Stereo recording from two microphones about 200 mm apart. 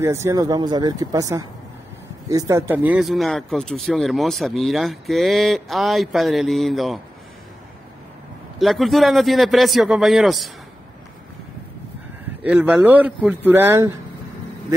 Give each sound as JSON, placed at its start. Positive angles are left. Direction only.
{"t": 0.0, "sound": "speech", "side_deg": -15}
{"t": 8.5, "sound": "speech", "side_deg": 0}
{"t": 12.4, "sound": "speech", "side_deg": -10}